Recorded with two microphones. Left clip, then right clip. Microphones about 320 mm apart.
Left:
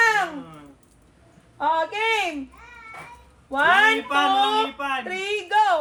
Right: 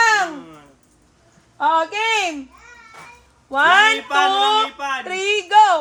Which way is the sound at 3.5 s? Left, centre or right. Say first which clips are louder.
Right 4 dB; right.